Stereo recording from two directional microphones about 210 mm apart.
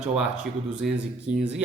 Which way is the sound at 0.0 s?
5° right (ahead or behind).